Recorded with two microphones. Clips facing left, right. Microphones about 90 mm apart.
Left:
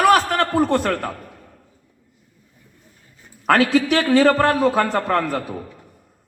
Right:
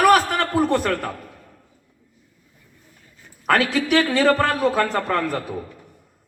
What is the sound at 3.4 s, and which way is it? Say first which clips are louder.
A man's voice: left 3 dB; 35° left (ahead or behind).